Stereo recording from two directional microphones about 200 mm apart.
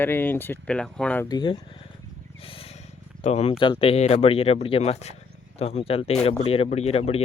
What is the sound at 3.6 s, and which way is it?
Speech, 25° left (ahead or behind).